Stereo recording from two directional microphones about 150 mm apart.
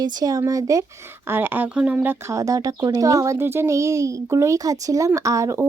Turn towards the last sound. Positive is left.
turn(degrees=-20)  # may be behind; listen again after turning